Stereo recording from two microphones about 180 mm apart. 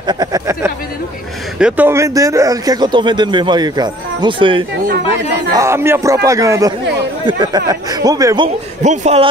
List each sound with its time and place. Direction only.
0.0 s speech: 20° right (ahead or behind)
4.8 s speech: 65° right (ahead or behind)
5.5 s a man's voice: 15° right (ahead or behind)
8.8 s speech: 40° right (ahead or behind)